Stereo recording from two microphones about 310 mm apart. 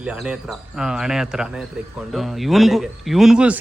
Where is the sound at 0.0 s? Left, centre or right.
Centre.